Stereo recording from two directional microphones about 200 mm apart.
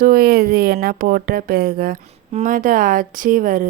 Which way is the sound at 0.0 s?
45° right (ahead or behind).